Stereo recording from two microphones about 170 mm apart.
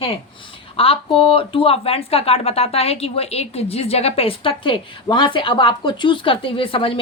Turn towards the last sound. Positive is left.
turn(degrees=30)  # may be behind; listen again after turning